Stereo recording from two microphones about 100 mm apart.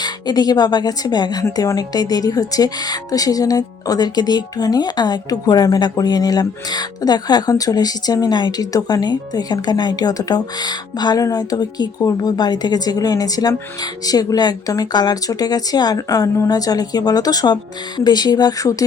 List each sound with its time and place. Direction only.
0.0 s a woman's voice: 45° left (ahead or behind)